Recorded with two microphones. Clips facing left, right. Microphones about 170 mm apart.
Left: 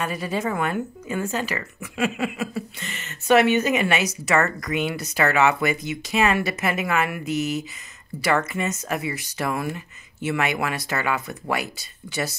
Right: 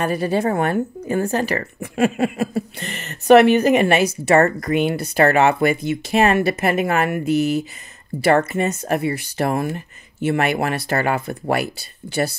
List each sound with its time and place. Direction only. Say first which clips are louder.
0.1 s a woman's voice: right 7 dB; 35° right (ahead or behind)
2.0 s speech: right 6 dB; 50° right (ahead or behind)
4.2 s speech: right 7 dB; 30° right (ahead or behind)
4.6 s speech: right 6 dB; 50° right (ahead or behind)
8.4 s a woman's voice: right 6 dB; 35° right (ahead or behind)
8.8 s speech: right 7 dB; 55° right (ahead or behind)
9.4 s speech: right 5 dB; 40° right (ahead or behind); by 11.1 s 55° right (ahead or behind)
11.1 s a woman's voice: right 6 dB; 30° right (ahead or behind)
11.5 s speech: right 5 dB; 60° right (ahead or behind)